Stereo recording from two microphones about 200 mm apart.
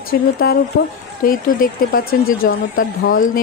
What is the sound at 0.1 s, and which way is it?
Speech, 50° left (ahead or behind).